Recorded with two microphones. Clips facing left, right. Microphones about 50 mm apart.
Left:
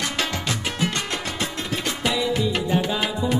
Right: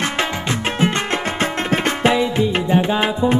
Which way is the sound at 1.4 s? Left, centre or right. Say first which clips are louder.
Right 10 dB; right.